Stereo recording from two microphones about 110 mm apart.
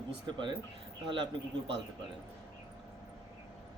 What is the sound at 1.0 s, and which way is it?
Speech, 45° right (ahead or behind).